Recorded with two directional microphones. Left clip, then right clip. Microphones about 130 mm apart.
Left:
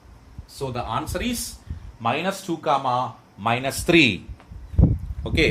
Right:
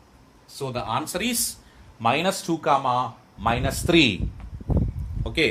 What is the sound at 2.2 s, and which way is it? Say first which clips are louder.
Speech: right 1 dB; 80° right.